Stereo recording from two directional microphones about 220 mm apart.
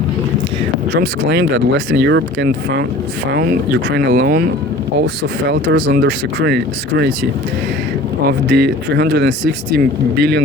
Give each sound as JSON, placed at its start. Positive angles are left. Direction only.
{"t": 0.9, "sound": "speech", "side_deg": -50}
{"t": 5.5, "sound": "speech", "side_deg": -50}
{"t": 8.3, "sound": "speech", "side_deg": -45}